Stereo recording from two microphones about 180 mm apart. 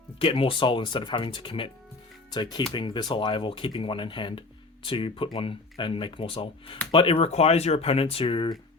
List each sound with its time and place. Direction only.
0.2 s speech: 30° left (ahead or behind)